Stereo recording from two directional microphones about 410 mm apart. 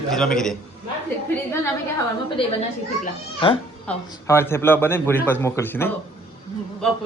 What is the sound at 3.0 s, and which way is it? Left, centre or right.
A child's voice, centre.